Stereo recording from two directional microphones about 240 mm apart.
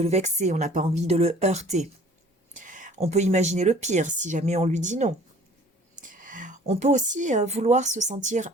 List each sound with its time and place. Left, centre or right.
0.0 s speech: right